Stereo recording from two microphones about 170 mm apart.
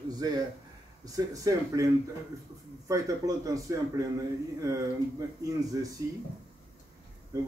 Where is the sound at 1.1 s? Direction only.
20° right (ahead or behind).